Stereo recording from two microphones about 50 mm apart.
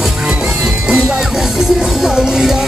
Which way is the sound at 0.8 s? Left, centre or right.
Centre.